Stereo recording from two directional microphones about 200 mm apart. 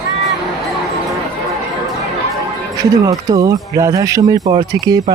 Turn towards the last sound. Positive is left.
turn(degrees=-20)  # may be behind; listen again after turning